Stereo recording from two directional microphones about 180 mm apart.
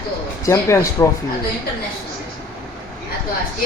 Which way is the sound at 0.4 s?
15° left (ahead or behind).